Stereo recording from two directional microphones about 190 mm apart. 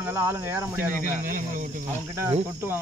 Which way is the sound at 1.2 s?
45° right (ahead or behind).